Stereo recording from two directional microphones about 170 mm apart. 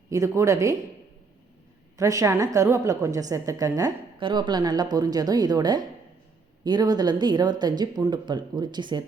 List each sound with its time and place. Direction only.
0.1 s a woman's voice: 20° right (ahead or behind)
2.0 s a woman's voice: 20° right (ahead or behind)